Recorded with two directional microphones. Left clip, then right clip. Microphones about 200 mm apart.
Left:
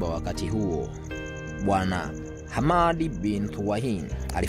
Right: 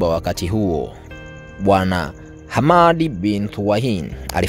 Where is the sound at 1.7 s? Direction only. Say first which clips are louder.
Right 10 dB; 50° right (ahead or behind).